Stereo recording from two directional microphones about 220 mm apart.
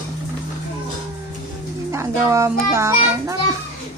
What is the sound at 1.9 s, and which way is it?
Speech, 10° right (ahead or behind).